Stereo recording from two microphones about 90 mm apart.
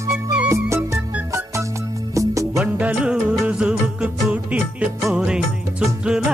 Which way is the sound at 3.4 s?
5° right (ahead or behind).